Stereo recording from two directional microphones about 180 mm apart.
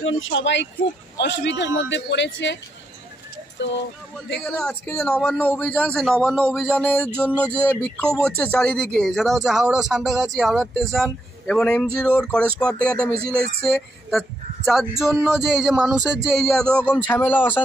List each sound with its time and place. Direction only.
0.0 s speech: 90° left
1.1 s a man's voice: 75° left (ahead or behind)
4.5 s a man's voice: 5° left (ahead or behind)